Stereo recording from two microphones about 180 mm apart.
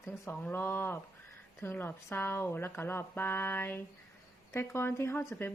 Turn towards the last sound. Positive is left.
turn(degrees=10)  # may be behind; listen again after turning